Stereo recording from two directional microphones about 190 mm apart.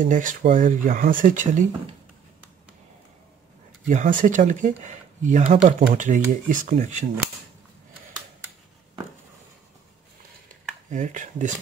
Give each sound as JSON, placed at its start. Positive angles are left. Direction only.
{"t": 0.0, "sound": "speech", "side_deg": -45}
{"t": 3.9, "sound": "speech", "side_deg": -45}
{"t": 10.9, "sound": "speech", "side_deg": -40}